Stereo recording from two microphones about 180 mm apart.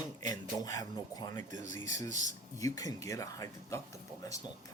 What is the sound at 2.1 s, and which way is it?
Speech, 40° right (ahead or behind).